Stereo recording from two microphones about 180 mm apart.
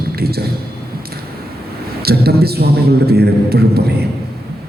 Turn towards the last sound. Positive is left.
turn(degrees=-60)  # may be behind; listen again after turning